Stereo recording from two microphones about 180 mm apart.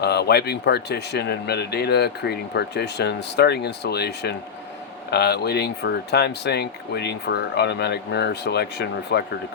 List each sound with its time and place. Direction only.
0.0 s speech: 65° left (ahead or behind)